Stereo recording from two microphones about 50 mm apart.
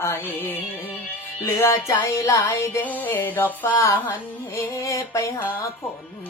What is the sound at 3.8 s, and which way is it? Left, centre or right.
Music, left.